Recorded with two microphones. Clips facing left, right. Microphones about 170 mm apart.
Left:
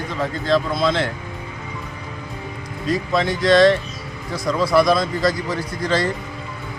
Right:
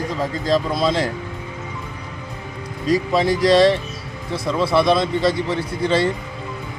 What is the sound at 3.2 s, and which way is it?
A man's voice, 35° right (ahead or behind).